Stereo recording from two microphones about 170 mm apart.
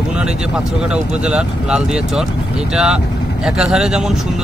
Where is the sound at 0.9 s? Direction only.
5° right (ahead or behind).